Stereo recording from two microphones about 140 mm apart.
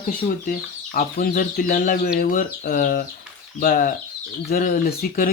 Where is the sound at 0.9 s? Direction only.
85° left.